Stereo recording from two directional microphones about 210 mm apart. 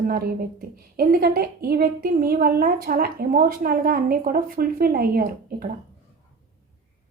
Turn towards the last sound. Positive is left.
turn(degrees=-45)  # may be behind; listen again after turning